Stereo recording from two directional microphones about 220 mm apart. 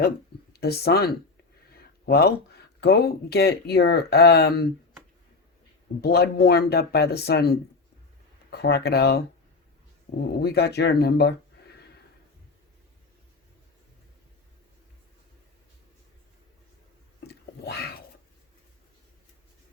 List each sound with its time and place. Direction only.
0.5 s speech: 45° left (ahead or behind)
6.0 s speech: 45° left (ahead or behind)
10.1 s speech: 35° left (ahead or behind)
10.4 s speech: 45° left (ahead or behind)
17.2 s a sound: 45° left (ahead or behind)